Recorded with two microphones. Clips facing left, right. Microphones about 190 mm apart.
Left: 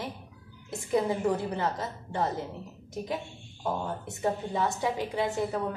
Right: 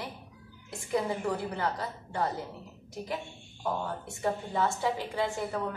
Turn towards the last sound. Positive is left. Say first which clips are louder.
# left 2 dB
turn(degrees=20)  # may be behind; listen again after turning